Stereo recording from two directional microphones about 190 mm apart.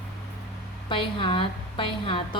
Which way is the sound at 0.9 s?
25° left (ahead or behind).